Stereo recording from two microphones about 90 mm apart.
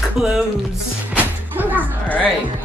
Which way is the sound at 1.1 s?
20° right (ahead or behind).